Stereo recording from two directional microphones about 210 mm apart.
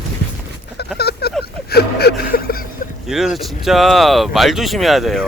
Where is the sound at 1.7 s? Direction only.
50° left (ahead or behind).